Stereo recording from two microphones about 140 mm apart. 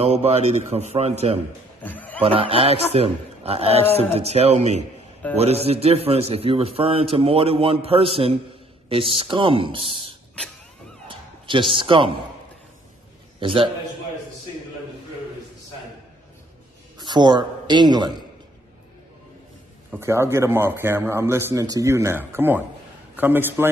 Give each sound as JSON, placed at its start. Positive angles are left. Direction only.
{"t": 0.0, "sound": "a man's voice", "side_deg": -50}
{"t": 1.8, "sound": "a sound", "side_deg": 10}
{"t": 2.1, "sound": "a man's voice", "side_deg": -40}
{"t": 11.1, "sound": "a sound", "side_deg": -35}
{"t": 13.4, "sound": "a man's voice", "side_deg": -35}
{"t": 17.0, "sound": "a man's voice", "side_deg": -30}
{"t": 20.0, "sound": "a man's voice", "side_deg": -20}